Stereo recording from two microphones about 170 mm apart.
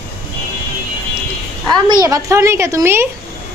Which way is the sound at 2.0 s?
20° right (ahead or behind).